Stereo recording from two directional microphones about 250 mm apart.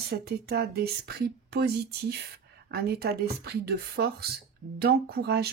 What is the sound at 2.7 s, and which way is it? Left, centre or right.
Speech, right.